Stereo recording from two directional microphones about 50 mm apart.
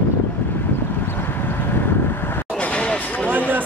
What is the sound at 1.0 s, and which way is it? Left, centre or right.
Vehicle, left.